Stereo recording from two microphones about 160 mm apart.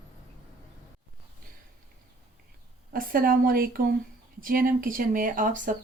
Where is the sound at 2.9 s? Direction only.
60° right (ahead or behind).